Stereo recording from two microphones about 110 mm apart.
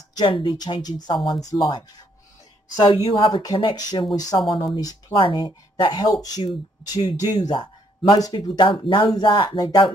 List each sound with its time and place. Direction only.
0.2 s speech: 45° left (ahead or behind)
4.4 s speech: 50° left (ahead or behind)